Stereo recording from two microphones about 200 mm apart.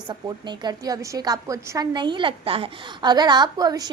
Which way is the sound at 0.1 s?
20° right (ahead or behind).